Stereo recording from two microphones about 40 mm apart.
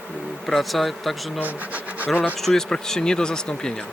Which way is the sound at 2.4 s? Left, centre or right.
Centre.